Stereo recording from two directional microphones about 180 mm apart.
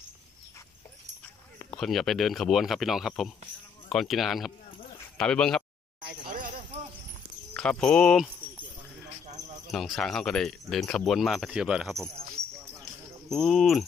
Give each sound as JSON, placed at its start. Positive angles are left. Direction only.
{"t": 1.8, "sound": "speech", "side_deg": 0}
{"t": 5.9, "sound": "a sound", "side_deg": -50}
{"t": 7.5, "sound": "speech", "side_deg": 5}
{"t": 9.7, "sound": "speech", "side_deg": 0}
{"t": 13.3, "sound": "speech", "side_deg": 0}